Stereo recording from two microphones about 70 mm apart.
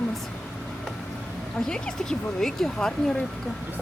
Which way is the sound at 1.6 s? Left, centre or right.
Centre.